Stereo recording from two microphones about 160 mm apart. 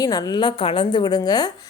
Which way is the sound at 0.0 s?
25° left (ahead or behind).